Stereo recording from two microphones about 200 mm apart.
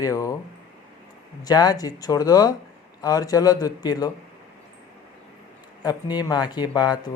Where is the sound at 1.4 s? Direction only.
20° left (ahead or behind).